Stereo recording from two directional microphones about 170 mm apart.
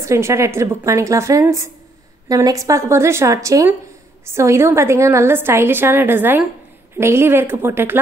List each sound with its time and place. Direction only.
0.0 s a woman's voice: 15° right (ahead or behind)